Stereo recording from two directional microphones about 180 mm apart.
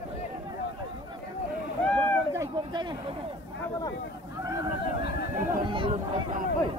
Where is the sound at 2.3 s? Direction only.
20° right (ahead or behind).